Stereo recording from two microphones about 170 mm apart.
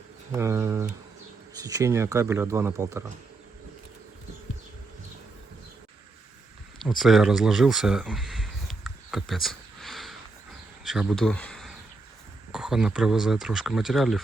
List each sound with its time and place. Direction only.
0.3 s speech: 15° right (ahead or behind)
6.7 s a sound: centre (ahead or behind)
10.8 s speech: 5° right (ahead or behind)